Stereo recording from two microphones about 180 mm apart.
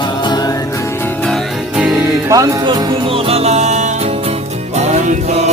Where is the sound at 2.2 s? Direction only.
20° right (ahead or behind).